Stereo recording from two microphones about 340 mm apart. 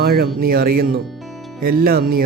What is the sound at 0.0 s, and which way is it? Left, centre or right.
Speech, right.